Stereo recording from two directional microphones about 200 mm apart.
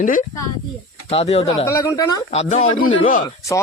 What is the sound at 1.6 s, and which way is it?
Speech, 15° left (ahead or behind).